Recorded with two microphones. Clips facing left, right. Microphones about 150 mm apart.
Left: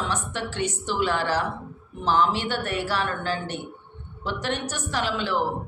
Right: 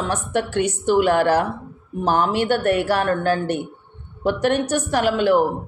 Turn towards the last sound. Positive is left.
turn(degrees=-50)  # may be behind; listen again after turning